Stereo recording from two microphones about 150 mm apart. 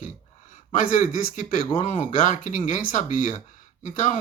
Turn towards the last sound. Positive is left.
turn(degrees=55)  # may be behind; listen again after turning